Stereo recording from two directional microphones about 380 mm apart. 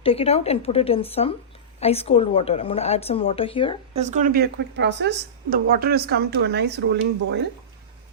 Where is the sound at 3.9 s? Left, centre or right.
Centre.